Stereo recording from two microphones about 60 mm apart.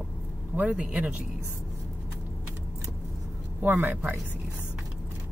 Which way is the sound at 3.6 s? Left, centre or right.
Right.